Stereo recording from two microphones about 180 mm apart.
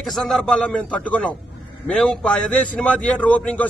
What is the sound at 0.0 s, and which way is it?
A man's voice, centre (ahead or behind).